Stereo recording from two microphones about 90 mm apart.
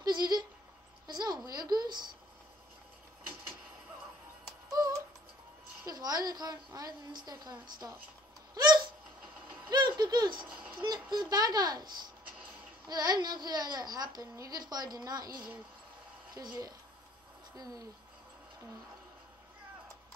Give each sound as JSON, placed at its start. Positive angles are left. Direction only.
{"t": 0.0, "sound": "a sound", "side_deg": -50}
{"t": 4.6, "sound": "music", "side_deg": -40}
{"t": 5.9, "sound": "a child's voice", "side_deg": -45}
{"t": 8.5, "sound": "hiccup", "side_deg": -55}
{"t": 9.7, "sound": "a child's voice", "side_deg": -50}